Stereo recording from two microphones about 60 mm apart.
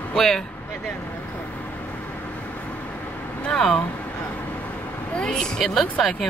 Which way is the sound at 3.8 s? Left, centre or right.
Left.